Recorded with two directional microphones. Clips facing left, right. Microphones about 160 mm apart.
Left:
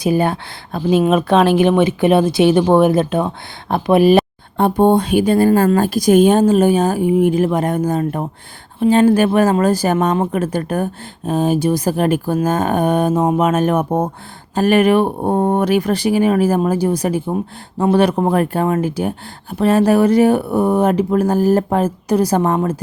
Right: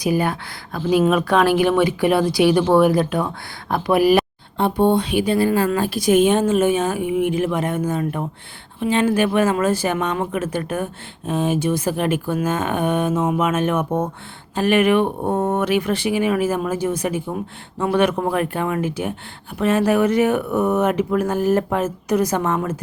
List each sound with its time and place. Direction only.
0.0 s speech: 25° left (ahead or behind)
4.5 s speech: 45° left (ahead or behind)